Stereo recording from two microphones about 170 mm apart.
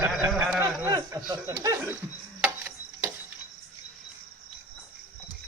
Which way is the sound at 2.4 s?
10° right (ahead or behind).